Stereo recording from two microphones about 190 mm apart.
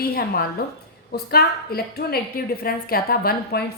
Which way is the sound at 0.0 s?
55° left (ahead or behind).